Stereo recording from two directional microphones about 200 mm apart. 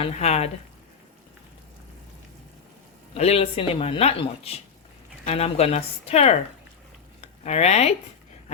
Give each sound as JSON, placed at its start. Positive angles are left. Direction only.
{"t": 0.0, "sound": "speech", "side_deg": 35}
{"t": 3.2, "sound": "speech", "side_deg": 30}